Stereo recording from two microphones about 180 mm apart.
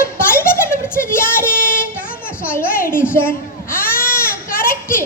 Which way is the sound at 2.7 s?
50° left (ahead or behind).